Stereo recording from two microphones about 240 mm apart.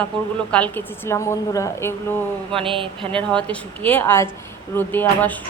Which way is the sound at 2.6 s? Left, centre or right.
Right.